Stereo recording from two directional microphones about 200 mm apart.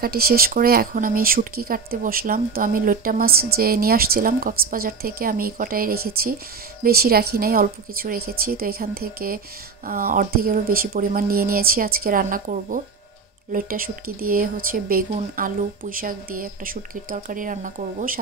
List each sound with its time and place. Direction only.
0.0 s a woman's voice: 50° right (ahead or behind)